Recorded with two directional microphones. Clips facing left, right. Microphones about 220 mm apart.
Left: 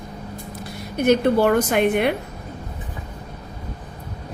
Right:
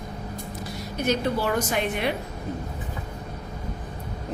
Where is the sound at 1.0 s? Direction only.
55° left (ahead or behind).